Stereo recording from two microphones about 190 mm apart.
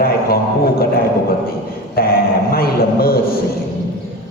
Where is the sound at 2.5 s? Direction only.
55° left (ahead or behind).